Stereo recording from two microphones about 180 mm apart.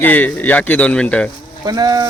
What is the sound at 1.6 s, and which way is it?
Speech, 20° right (ahead or behind).